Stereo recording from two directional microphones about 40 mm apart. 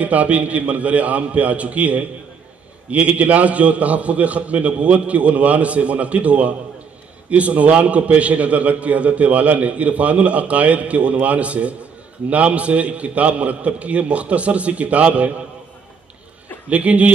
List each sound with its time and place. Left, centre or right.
0.0 s a man's voice: right
16.6 s a man's voice: right